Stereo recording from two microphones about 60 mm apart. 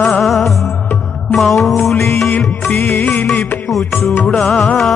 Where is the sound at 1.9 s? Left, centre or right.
Left.